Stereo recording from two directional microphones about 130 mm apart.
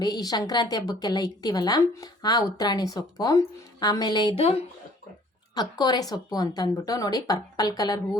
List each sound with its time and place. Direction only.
0.0 s a woman's voice: 30° left (ahead or behind)
4.4 s speech: 50° left (ahead or behind)
5.5 s a woman's voice: 30° left (ahead or behind)